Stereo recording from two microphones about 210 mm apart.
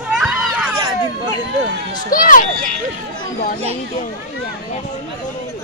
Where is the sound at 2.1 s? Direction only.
40° left (ahead or behind).